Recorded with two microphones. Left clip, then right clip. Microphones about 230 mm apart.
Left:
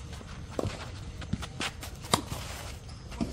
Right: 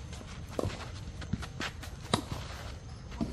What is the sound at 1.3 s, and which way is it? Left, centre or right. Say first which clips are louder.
Walk: left 3 dB; left.